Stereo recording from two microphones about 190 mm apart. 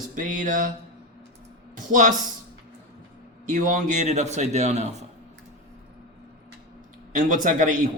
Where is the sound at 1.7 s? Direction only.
40° right (ahead or behind).